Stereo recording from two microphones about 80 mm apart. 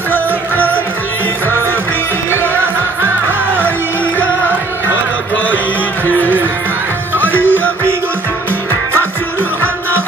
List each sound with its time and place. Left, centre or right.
0.1 s music: left
7.2 s music: left